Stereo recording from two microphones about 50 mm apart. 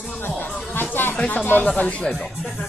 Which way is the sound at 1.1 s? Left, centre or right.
Left.